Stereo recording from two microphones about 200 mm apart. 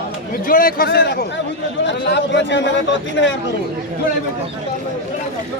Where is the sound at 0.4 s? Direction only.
45° left (ahead or behind); by 3.3 s 65° left (ahead or behind).